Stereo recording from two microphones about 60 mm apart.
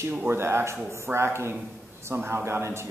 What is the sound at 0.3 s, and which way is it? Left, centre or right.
Speech, right.